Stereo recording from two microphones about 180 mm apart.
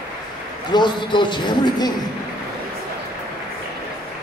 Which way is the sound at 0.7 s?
25° left (ahead or behind).